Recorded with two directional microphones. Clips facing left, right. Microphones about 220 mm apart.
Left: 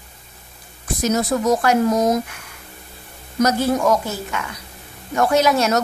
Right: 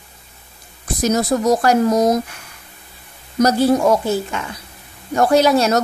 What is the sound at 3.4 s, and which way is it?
A woman's voice, 30° right (ahead or behind).